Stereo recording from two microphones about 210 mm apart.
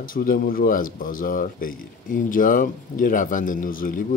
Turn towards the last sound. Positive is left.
turn(degrees=40)  # may be behind; listen again after turning